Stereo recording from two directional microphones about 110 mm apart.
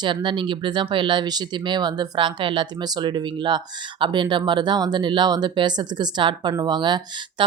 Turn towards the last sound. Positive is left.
turn(degrees=-40)  # may be behind; listen again after turning